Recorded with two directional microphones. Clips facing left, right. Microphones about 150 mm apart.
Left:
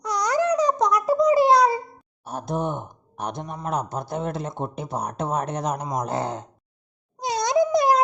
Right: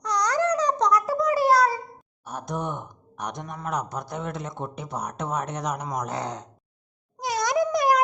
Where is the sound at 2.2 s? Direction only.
30° left (ahead or behind).